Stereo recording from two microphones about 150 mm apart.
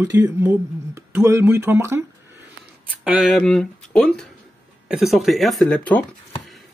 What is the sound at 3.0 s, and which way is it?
Speech, 10° right (ahead or behind).